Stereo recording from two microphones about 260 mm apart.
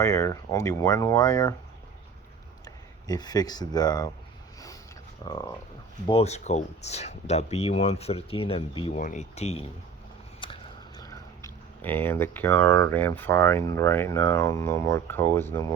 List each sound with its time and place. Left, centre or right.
0.0 s speech: centre
2.6 s speech: centre
5.2 s speech: centre